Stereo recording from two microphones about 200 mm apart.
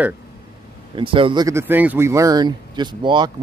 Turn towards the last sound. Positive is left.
turn(degrees=-25)  # may be behind; listen again after turning